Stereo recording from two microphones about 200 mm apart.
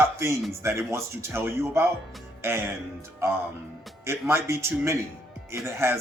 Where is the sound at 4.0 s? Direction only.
15° right (ahead or behind).